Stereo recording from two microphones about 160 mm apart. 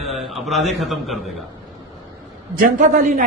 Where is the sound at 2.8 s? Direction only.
55° right (ahead or behind).